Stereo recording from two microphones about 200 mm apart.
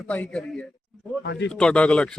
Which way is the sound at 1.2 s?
60° left (ahead or behind).